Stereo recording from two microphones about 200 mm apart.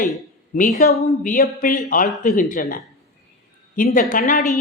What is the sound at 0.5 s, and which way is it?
A woman's voice, 40° left (ahead or behind).